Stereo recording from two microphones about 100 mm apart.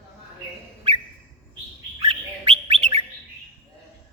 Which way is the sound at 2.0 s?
60° right (ahead or behind).